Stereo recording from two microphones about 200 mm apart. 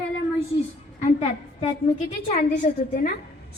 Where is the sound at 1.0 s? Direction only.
35° left (ahead or behind).